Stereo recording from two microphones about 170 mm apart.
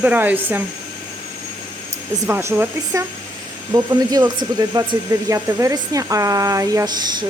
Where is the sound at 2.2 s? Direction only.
15° right (ahead or behind).